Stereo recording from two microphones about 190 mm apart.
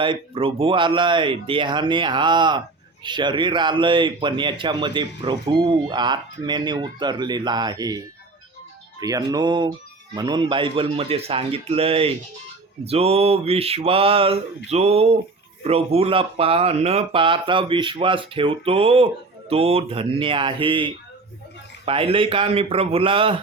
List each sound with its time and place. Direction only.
0.0 s speech: 25° right (ahead or behind)
12.8 s a sound: 30° right (ahead or behind)
15.6 s speech: 30° right (ahead or behind)